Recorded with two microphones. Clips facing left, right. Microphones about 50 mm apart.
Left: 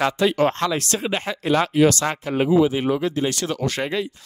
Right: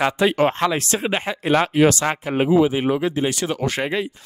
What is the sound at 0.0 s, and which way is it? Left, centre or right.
Speech, right.